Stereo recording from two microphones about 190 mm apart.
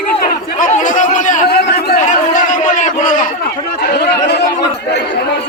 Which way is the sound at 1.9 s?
40° left (ahead or behind).